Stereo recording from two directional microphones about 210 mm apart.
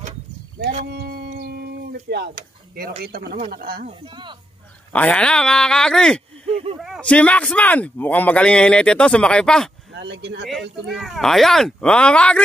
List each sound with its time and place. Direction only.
0.8 s a sound: 50° right (ahead or behind)
3.0 s speech: 45° right (ahead or behind)
4.0 s speech: 20° right (ahead or behind)
4.9 s a man's voice: 5° left (ahead or behind)
9.9 s speech: 55° right (ahead or behind)
10.9 s a man's voice: centre (ahead or behind)